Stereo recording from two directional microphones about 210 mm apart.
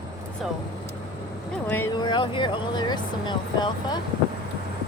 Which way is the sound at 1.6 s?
10° left (ahead or behind).